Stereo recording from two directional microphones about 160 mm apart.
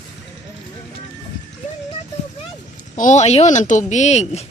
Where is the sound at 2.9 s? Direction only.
50° left (ahead or behind).